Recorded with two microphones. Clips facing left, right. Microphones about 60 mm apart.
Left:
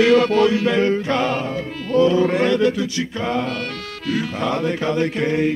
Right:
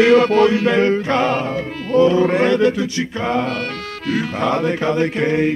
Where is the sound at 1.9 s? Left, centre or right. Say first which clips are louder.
Right 2 dB; right.